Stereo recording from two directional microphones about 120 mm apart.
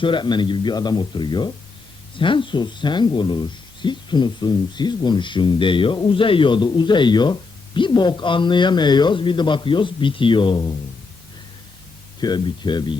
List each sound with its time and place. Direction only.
0.0 s speech: 40° left (ahead or behind)
12.2 s speech: 35° left (ahead or behind)